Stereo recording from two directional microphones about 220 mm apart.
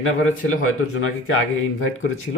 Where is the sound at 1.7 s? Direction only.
65° left (ahead or behind).